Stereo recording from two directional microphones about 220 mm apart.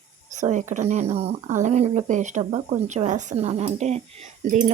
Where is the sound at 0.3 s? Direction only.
35° right (ahead or behind).